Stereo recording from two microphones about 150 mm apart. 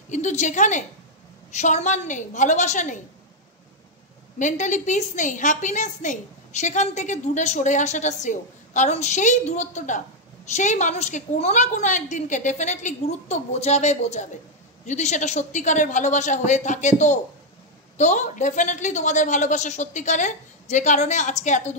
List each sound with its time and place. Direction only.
0.1 s a woman's voice: 50° left (ahead or behind)
4.4 s a woman's voice: 55° left (ahead or behind)